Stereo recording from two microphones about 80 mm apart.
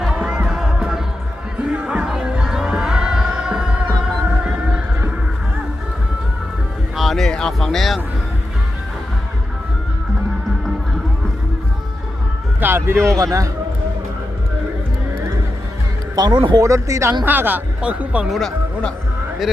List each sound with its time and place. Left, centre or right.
0.0 s music: centre
6.9 s a sound: centre
12.5 s speech: right
13.1 s a man's voice: right
16.1 s speech: right
16.6 s speech: right
17.2 s speech: right
18.3 s speech: centre